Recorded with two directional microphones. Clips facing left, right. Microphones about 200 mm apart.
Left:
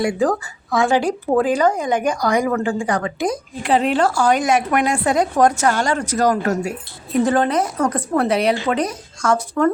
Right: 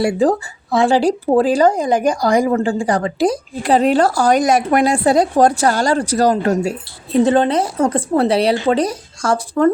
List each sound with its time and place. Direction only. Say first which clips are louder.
0.0 s speech: right 3 dB; 30° right (ahead or behind)